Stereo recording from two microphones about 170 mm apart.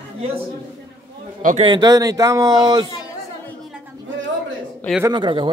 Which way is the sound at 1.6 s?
25° right (ahead or behind).